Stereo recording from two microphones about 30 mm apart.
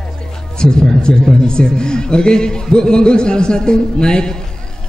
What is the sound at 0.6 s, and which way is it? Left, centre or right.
A man's voice, left.